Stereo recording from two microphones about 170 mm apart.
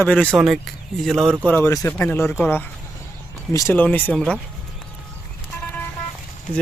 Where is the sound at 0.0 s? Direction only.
10° left (ahead or behind).